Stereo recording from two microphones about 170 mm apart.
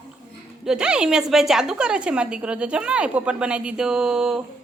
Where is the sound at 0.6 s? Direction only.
5° right (ahead or behind).